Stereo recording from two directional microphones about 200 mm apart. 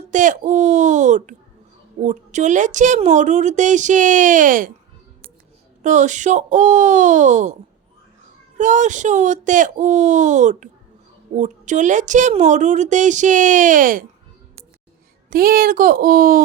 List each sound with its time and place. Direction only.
0.1 s a woman's voice: 40° right (ahead or behind)
5.8 s a woman's voice: 40° right (ahead or behind)
8.5 s a woman's voice: 40° right (ahead or behind)
15.3 s speech: 45° right (ahead or behind)